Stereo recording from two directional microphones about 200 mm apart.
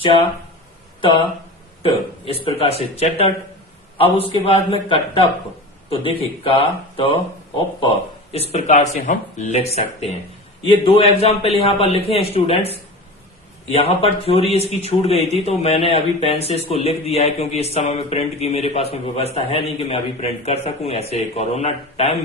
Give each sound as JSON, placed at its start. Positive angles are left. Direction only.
{"t": 2.4, "sound": "a man's voice", "side_deg": 30}